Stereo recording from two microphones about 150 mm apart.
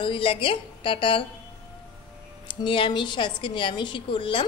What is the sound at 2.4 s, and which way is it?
Speech, 35° left (ahead or behind).